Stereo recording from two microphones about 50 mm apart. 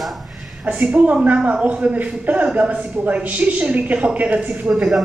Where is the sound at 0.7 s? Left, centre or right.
Right.